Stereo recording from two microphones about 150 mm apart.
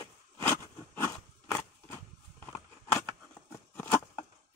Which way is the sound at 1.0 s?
15° left (ahead or behind).